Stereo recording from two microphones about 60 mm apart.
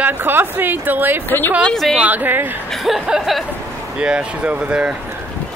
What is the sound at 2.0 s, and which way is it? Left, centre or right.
Speech, right.